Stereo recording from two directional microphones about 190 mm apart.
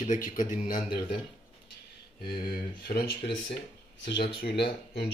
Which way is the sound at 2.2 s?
55° left (ahead or behind).